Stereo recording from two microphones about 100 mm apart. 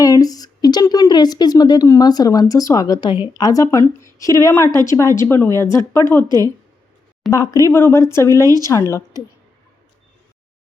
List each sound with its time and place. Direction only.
0.0 s speech: 40° left (ahead or behind)
3.1 s a woman's voice: 55° left (ahead or behind)
3.4 s speech: 35° left (ahead or behind)
6.2 s a woman's voice: 40° right (ahead or behind)
7.3 s speech: 35° left (ahead or behind)